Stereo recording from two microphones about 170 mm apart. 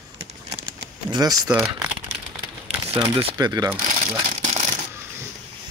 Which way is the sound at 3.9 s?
45° right (ahead or behind).